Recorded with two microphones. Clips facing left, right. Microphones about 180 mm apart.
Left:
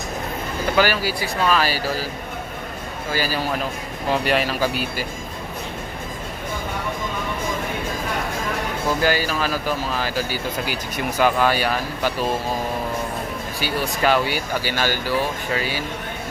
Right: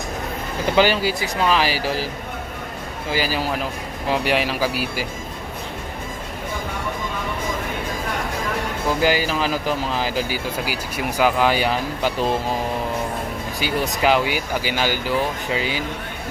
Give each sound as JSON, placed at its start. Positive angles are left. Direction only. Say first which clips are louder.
{"t": 0.8, "sound": "speech", "louder": "right 3 dB", "side_deg": -20}
{"t": 3.1, "sound": "speech", "louder": "right 1 dB", "side_deg": -15}
{"t": 9.0, "sound": "speech", "louder": "right 3 dB", "side_deg": -15}
{"t": 13.6, "sound": "speech", "louder": "right 1 dB", "side_deg": -20}